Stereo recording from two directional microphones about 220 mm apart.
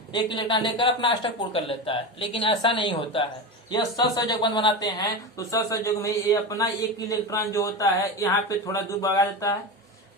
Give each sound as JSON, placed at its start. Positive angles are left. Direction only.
{"t": 0.3, "sound": "speech", "side_deg": 20}